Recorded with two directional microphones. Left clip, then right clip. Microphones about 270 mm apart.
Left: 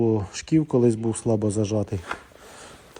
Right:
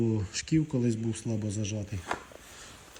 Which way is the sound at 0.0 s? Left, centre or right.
Centre.